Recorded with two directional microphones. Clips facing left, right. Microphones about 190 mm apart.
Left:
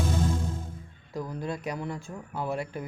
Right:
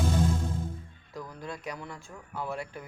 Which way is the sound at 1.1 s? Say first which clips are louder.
Left 6 dB; 20° left (ahead or behind).